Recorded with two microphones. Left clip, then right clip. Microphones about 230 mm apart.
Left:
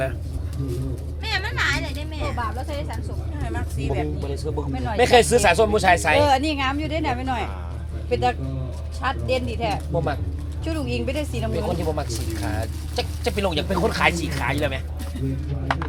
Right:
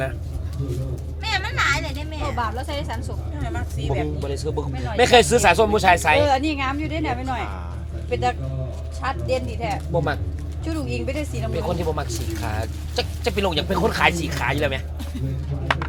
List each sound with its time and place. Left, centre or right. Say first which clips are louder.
1.2 s a sound: right 2 dB; centre
3.4 s speech: even; centre
6.2 s a woman's voice: left 1 dB; left
9.9 s speech: right 2 dB; centre
10.6 s a woman's voice: left 1 dB; left
11.5 s speech: right 1 dB; centre
15.6 s a sound: right 2 dB; right